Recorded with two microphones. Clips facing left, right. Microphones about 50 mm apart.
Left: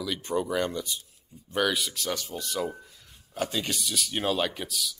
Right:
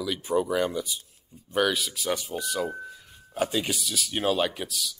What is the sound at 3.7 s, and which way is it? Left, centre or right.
Speech, centre.